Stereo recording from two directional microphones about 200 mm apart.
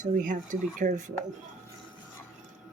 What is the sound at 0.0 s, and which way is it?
Speech, 40° right (ahead or behind).